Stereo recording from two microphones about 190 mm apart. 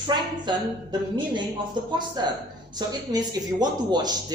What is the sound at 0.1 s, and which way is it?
Speech, 20° right (ahead or behind).